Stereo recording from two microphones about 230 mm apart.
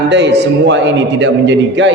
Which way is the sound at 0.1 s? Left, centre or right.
Right.